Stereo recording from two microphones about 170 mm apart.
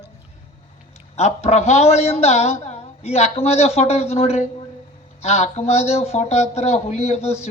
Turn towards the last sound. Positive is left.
turn(degrees=40)  # may be behind; listen again after turning